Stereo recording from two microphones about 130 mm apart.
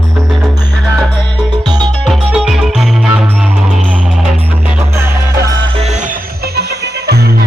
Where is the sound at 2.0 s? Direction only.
Centre (ahead or behind).